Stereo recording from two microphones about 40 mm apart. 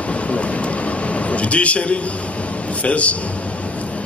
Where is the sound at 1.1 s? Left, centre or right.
Left.